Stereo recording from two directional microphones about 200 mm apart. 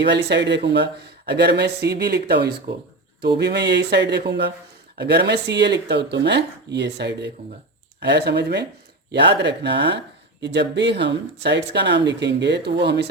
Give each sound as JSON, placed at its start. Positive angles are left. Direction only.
{"t": 0.0, "sound": "speech", "side_deg": -60}